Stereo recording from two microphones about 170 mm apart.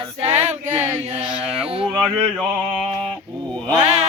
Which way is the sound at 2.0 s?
Centre (ahead or behind).